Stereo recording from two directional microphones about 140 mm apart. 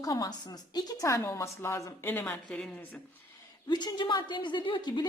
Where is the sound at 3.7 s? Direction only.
30° left (ahead or behind).